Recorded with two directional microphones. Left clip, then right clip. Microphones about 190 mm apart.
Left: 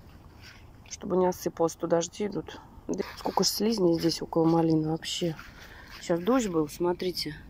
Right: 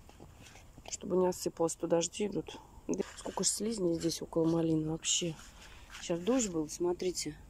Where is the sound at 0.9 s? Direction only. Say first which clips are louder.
Left 5 dB; 5° right (ahead or behind).